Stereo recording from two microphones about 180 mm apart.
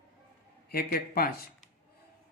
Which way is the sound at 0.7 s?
60° left (ahead or behind).